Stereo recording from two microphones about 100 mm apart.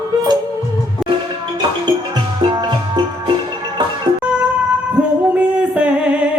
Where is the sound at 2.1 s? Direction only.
45° right (ahead or behind).